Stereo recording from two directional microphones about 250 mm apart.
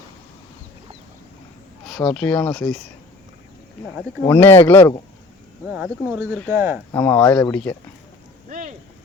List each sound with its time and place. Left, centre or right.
1.9 s speech: centre
4.3 s speech: centre
5.7 s speech: centre
6.9 s speech: centre
8.4 s a sound: right